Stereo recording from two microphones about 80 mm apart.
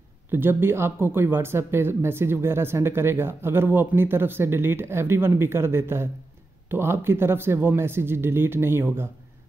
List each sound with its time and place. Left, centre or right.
0.3 s speech: right